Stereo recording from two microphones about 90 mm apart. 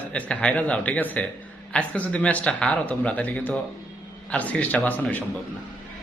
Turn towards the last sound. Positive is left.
turn(degrees=15)  # may be behind; listen again after turning